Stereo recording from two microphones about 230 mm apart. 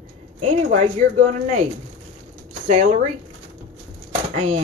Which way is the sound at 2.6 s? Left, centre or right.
Right.